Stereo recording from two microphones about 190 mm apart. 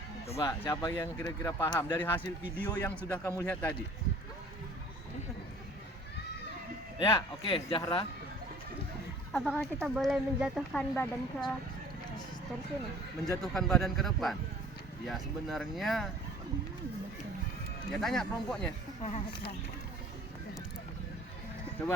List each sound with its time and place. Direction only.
0.3 s speech: 15° left (ahead or behind)
7.0 s speech: 25° left (ahead or behind)
9.3 s a woman's voice: centre (ahead or behind)
13.4 s a woman's voice: centre (ahead or behind)
17.9 s a woman's voice: centre (ahead or behind)
19.0 s speech: 35° left (ahead or behind)